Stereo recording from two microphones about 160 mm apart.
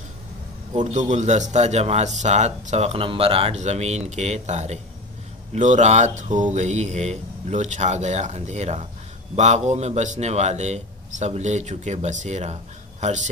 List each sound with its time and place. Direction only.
0.7 s a man's voice: 50° right (ahead or behind)